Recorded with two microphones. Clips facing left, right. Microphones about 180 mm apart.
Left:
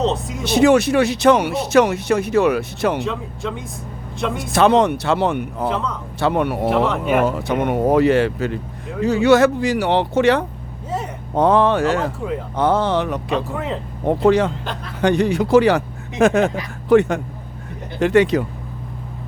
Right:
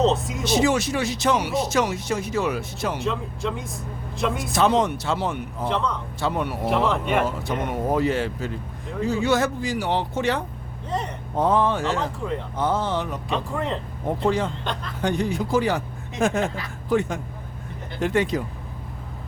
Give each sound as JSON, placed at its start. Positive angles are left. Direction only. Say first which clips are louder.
{"t": 0.0, "sound": "speech", "louder": "even", "side_deg": 0}
{"t": 0.4, "sound": "speech", "louder": "left 7 dB", "side_deg": 60}
{"t": 3.0, "sound": "speech", "louder": "left 2 dB", "side_deg": 0}
{"t": 4.5, "sound": "speech", "louder": "left 7 dB", "side_deg": 65}
{"t": 6.7, "sound": "speech", "louder": "left 1 dB", "side_deg": 0}
{"t": 7.3, "sound": "speech", "louder": "left 7 dB", "side_deg": 70}
{"t": 13.3, "sound": "speech", "louder": "left 2 dB", "side_deg": 0}
{"t": 14.1, "sound": "speech", "louder": "left 8 dB", "side_deg": 75}
{"t": 14.6, "sound": "speech", "louder": "left 1 dB", "side_deg": 5}
{"t": 15.0, "sound": "speech", "louder": "left 7 dB", "side_deg": 75}